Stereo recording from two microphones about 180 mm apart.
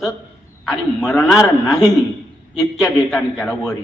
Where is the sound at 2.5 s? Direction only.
Centre (ahead or behind).